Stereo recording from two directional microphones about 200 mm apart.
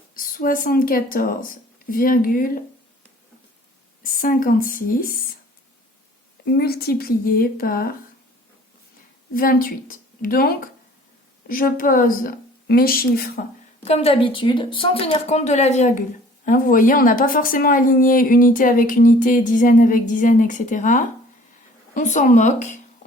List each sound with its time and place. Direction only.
0.2 s a woman's voice: 45° left (ahead or behind)
4.0 s a woman's voice: 45° left (ahead or behind)
6.4 s a woman's voice: 50° left (ahead or behind)
9.3 s a woman's voice: 45° left (ahead or behind)
13.8 s a woman's voice: 30° left (ahead or behind)